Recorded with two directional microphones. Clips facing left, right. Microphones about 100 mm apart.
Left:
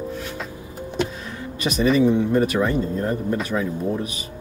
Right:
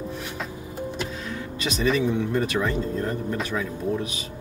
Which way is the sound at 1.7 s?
10° left (ahead or behind).